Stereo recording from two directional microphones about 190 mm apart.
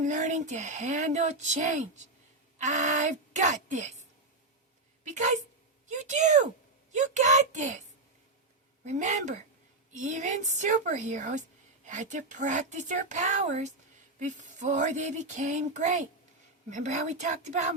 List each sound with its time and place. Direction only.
0.0 s a woman's voice: 40° right (ahead or behind)
5.0 s a woman's voice: 40° right (ahead or behind)
8.8 s a woman's voice: 40° right (ahead or behind)